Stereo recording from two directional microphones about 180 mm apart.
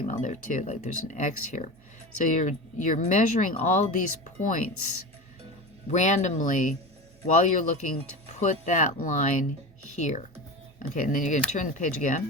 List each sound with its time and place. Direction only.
0.0 s speech: 45° left (ahead or behind)
5.9 s speech: 40° left (ahead or behind)